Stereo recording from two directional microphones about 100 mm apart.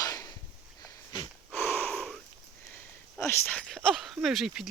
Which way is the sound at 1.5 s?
20° left (ahead or behind).